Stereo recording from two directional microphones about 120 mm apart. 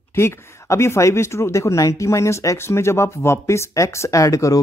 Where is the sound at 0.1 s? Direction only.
20° left (ahead or behind).